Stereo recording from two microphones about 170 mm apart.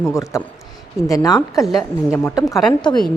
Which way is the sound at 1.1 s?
20° left (ahead or behind).